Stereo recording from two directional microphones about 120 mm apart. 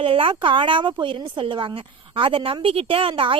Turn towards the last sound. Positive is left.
turn(degrees=-50)  # may be behind; listen again after turning